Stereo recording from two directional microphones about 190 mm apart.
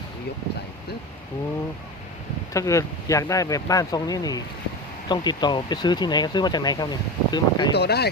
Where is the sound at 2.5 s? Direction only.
15° left (ahead or behind).